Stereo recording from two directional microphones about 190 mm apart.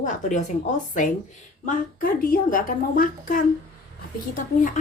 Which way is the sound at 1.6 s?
50° left (ahead or behind).